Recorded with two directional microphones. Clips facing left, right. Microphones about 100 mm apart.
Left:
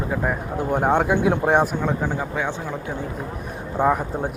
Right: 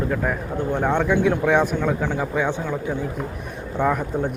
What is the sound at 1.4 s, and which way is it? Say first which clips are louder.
Speech: even; 35° left (ahead or behind).